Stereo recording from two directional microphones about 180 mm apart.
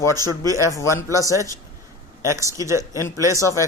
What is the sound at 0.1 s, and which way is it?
Speech, 20° right (ahead or behind).